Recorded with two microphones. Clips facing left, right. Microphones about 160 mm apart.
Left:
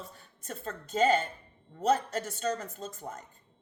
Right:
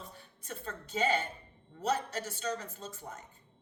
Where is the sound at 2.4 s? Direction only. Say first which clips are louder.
Left 4 dB; 45° left (ahead or behind).